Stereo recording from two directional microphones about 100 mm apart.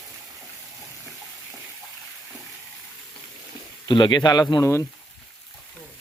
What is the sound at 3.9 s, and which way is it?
Speech, 50° left (ahead or behind).